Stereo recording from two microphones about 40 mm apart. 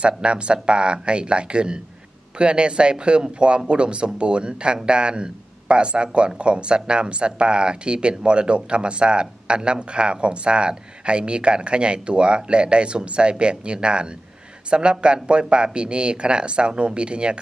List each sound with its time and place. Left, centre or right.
0.0 s speech: right